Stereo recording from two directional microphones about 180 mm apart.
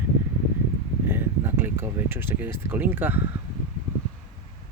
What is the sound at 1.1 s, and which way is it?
Speech, 15° right (ahead or behind).